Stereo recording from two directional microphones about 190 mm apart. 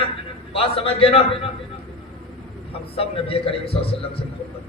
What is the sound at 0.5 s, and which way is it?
Speech, 30° left (ahead or behind).